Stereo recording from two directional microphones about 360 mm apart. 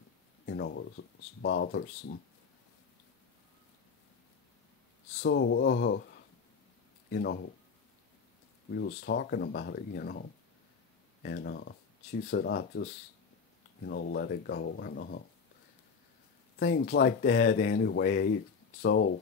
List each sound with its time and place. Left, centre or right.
0.5 s speech: left
5.2 s speech: left
7.1 s speech: left
8.7 s speech: left
11.2 s speech: left
13.8 s speech: left
16.5 s speech: left